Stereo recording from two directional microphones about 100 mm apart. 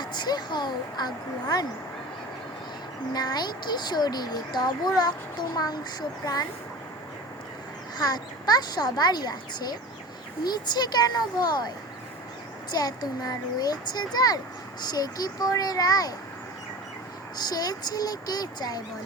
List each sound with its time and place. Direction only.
0.0 s speech: 45° left (ahead or behind)
3.1 s speech: 40° left (ahead or behind)
7.9 s speech: 40° left (ahead or behind)
12.7 s a child's voice: 40° left (ahead or behind)
17.3 s a child's voice: 40° left (ahead or behind)